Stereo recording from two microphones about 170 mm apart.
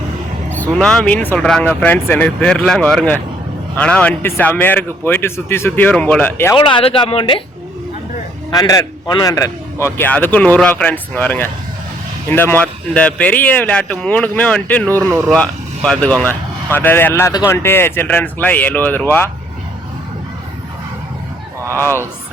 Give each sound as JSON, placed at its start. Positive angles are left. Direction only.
{"t": 0.5, "sound": "a man's voice", "side_deg": 5}
{"t": 6.6, "sound": "a man's voice", "side_deg": 30}
{"t": 8.5, "sound": "a man's voice", "side_deg": 20}